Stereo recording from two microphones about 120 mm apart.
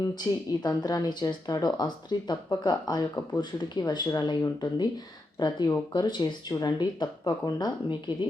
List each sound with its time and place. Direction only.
0.0 s speech: 30° left (ahead or behind)